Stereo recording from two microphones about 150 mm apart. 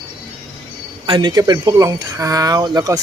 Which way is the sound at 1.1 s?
30° right (ahead or behind).